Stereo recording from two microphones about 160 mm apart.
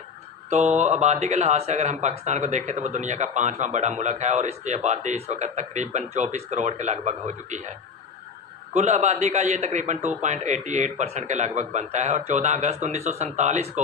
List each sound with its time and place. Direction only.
0.5 s speech: 45° right (ahead or behind)
8.7 s speech: 45° right (ahead or behind)